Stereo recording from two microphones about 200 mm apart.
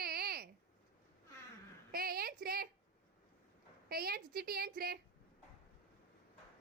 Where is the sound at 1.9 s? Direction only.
50° right (ahead or behind).